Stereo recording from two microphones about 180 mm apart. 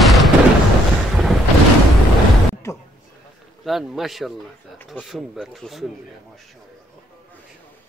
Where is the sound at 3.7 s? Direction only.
Centre (ahead or behind).